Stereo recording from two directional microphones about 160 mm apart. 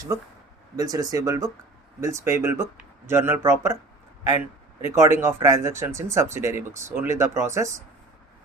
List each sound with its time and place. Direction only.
0.8 s speech: 20° right (ahead or behind)
4.8 s speech: 15° right (ahead or behind)